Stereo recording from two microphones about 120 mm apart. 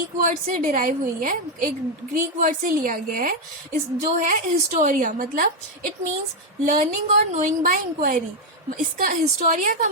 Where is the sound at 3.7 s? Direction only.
90° right.